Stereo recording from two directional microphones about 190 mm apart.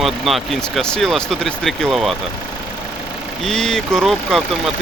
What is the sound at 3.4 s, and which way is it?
Speech, centre (ahead or behind).